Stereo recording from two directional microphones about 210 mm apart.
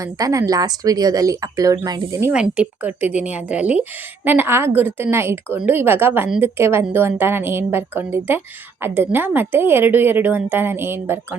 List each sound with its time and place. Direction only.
0.0 s a woman's voice: 15° right (ahead or behind)
2.3 s a woman's voice: 5° right (ahead or behind)